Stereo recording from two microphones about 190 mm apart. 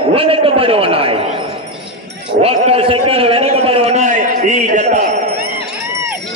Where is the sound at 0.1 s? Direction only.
30° right (ahead or behind).